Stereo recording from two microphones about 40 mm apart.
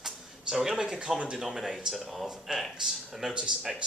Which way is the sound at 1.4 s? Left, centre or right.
Centre.